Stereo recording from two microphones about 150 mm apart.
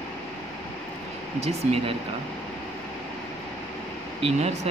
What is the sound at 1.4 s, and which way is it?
Speech, 40° right (ahead or behind).